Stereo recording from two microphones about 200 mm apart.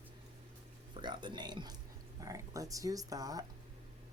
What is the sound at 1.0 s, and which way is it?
Speech, 20° right (ahead or behind).